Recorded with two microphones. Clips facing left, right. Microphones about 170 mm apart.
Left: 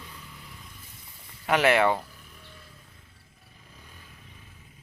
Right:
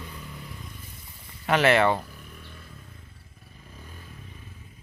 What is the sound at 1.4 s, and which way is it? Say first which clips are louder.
Speech: right 1 dB; 10° left (ahead or behind).